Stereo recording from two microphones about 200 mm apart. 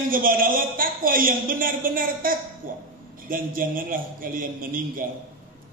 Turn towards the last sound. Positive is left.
turn(degrees=-45)  # may be behind; listen again after turning